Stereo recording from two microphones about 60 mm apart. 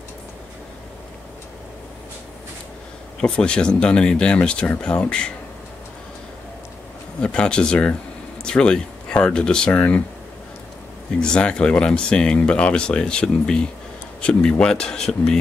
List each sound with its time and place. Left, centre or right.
3.2 s speech: centre
7.2 s speech: centre
9.7 s speech: left
11.1 s speech: centre